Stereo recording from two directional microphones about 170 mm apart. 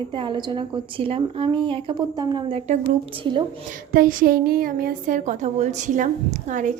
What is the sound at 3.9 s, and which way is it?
A woman's voice, 55° right (ahead or behind).